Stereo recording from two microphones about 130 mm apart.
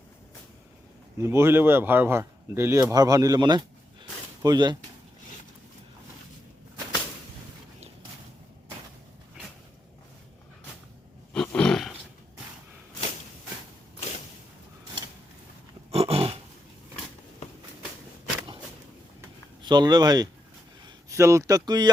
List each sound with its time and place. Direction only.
1.2 s speech: 20° right (ahead or behind)
11.3 s roar: 5° left (ahead or behind)
15.9 s dog: 50° right (ahead or behind)
19.6 s speech: 35° right (ahead or behind)